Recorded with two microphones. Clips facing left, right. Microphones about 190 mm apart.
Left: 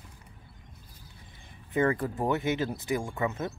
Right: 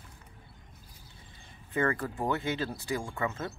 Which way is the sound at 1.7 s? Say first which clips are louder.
Left 3 dB; 20° left (ahead or behind).